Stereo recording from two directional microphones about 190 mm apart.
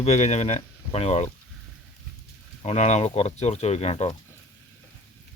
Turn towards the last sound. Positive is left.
turn(degrees=35)  # may be behind; listen again after turning